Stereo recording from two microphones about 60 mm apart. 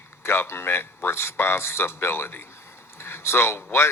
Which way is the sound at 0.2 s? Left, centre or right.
Left.